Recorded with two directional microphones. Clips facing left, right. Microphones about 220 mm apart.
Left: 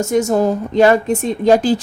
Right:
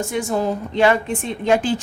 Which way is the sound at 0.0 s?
40° left (ahead or behind).